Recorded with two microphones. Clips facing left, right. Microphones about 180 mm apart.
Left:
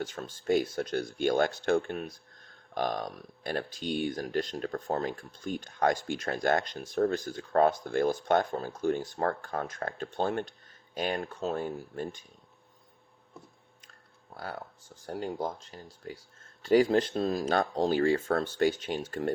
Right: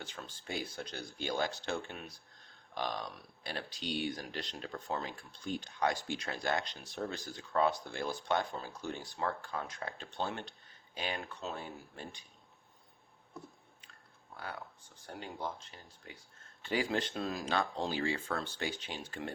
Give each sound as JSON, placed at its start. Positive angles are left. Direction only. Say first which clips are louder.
{"t": 0.0, "sound": "speech", "louder": "left 11 dB", "side_deg": 45}
{"t": 14.3, "sound": "speech", "louder": "left 5 dB", "side_deg": 40}